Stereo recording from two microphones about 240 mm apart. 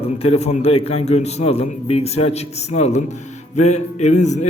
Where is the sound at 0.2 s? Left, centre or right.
Left.